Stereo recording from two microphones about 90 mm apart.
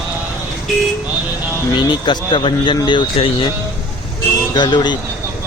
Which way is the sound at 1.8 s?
60° left (ahead or behind).